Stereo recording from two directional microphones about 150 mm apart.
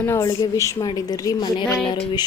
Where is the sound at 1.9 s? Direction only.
30° left (ahead or behind).